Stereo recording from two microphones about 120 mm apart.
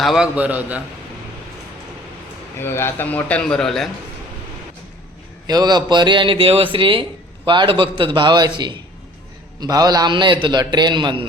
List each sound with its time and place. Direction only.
0.0 s a man's voice: 5° right (ahead or behind)
2.6 s a man's voice: 20° left (ahead or behind); by 3.8 s 5° left (ahead or behind)
5.5 s a man's voice: 35° right (ahead or behind)